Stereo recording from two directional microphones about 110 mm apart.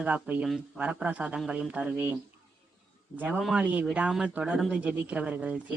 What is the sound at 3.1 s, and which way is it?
Speech, 15° right (ahead or behind).